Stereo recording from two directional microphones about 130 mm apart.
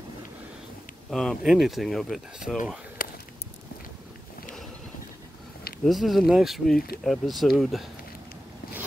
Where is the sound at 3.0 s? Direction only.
90° left.